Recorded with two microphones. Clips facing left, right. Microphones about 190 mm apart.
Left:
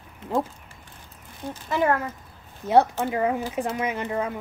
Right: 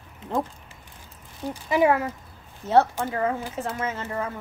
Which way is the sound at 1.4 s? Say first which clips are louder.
Right 3 dB; 10° right (ahead or behind).